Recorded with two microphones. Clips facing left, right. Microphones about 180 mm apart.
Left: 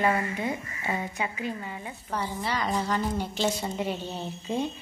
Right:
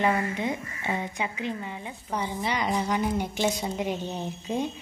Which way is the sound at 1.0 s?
15° right (ahead or behind).